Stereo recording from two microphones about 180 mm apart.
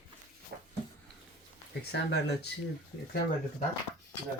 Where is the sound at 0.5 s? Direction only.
65° right (ahead or behind).